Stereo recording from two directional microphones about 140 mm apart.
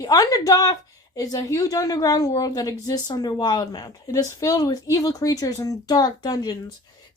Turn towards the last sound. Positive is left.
turn(degrees=30)  # may be behind; listen again after turning